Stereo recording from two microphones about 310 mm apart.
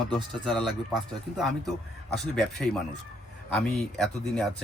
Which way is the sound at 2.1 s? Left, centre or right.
Centre.